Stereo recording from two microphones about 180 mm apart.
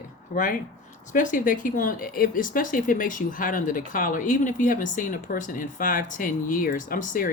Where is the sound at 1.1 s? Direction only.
45° left (ahead or behind).